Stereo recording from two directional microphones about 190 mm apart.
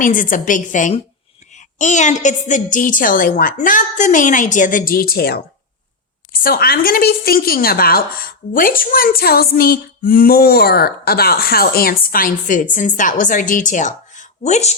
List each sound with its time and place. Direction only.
0.0 s speech: 45° left (ahead or behind)